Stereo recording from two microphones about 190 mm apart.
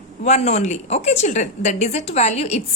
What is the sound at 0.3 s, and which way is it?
A woman's voice, 35° left (ahead or behind).